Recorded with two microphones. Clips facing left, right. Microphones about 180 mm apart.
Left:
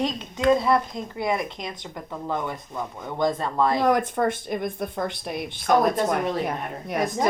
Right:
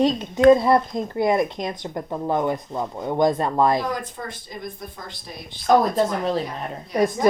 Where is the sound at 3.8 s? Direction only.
65° left (ahead or behind).